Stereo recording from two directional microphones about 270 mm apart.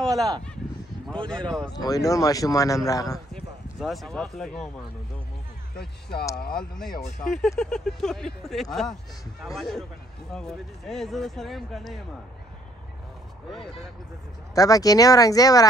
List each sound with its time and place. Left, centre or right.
0.0 s a sound: centre
1.0 s speech: centre
1.7 s speech: centre
3.8 s speech: centre
5.8 s speech: left
6.6 s speech: centre
14.5 s speech: centre